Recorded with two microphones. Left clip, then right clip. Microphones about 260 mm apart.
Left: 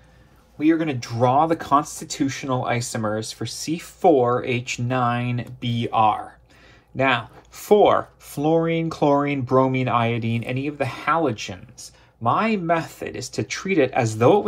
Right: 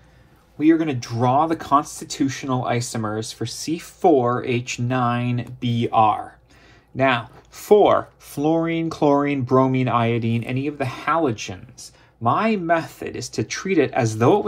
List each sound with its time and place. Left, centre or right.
0.6 s speech: right